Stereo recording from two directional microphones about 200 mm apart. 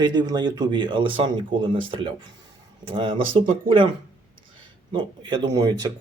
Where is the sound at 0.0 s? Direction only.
20° right (ahead or behind).